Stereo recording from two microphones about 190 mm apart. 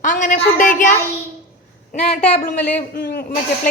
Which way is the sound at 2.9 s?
50° left (ahead or behind).